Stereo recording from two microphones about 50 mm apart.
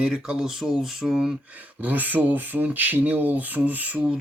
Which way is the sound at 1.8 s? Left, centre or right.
Right.